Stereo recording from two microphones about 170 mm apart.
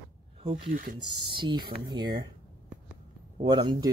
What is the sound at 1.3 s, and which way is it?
Speech, 30° right (ahead or behind).